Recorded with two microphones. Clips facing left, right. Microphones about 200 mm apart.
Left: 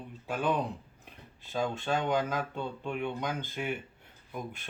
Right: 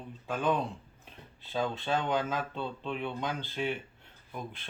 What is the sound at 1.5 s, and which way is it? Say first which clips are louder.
Speech: even; 10° left (ahead or behind).